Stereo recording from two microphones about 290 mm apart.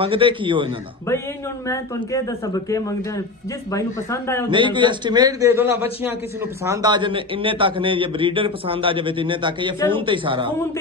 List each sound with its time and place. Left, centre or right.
0.0 s a man's voice: centre
1.7 s speech: centre
4.5 s a man's voice: centre